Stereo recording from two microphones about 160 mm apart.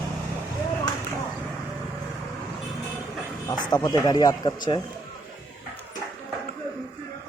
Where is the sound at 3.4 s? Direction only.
25° left (ahead or behind).